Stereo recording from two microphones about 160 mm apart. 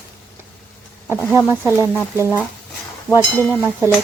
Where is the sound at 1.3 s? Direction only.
15° right (ahead or behind).